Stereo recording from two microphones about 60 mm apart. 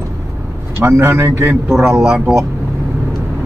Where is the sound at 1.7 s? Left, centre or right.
Centre.